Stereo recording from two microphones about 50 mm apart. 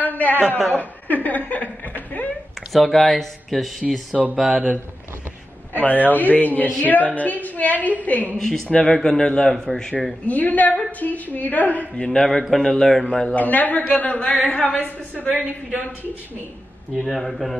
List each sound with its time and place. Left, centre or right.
0.0 s a man's voice: left
2.7 s speech: centre
4.4 s speech: centre
5.7 s a woman's voice: left
8.4 s a man's voice: centre
10.2 s a woman's voice: left
12.0 s a man's voice: centre
12.3 s a man's voice: centre
13.1 s a man's voice: centre
13.4 s a woman's voice: left
16.9 s speech: centre